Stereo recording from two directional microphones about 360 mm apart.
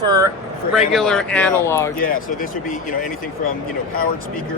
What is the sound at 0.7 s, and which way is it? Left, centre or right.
Speech, centre.